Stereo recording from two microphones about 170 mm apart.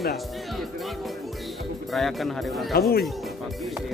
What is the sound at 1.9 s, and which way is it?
Speech, centre (ahead or behind).